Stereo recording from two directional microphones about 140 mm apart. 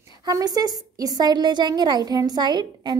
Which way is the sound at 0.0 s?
25° right (ahead or behind).